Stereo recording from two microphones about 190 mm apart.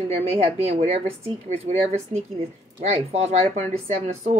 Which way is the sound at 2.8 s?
35° right (ahead or behind).